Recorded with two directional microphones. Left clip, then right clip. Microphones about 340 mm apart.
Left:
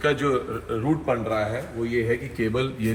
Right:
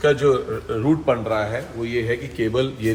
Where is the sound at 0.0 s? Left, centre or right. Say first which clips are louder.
Right 5 dB; centre.